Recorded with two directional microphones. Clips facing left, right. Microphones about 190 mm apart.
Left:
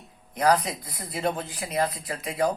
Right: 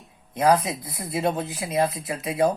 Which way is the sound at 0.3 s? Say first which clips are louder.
Right 2 dB; 25° right (ahead or behind).